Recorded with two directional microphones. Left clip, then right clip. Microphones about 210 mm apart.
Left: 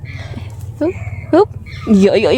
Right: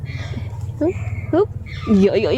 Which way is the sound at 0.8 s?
20° left (ahead or behind).